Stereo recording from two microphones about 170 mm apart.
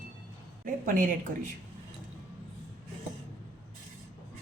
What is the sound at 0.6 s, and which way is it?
Speech, 55° right (ahead or behind).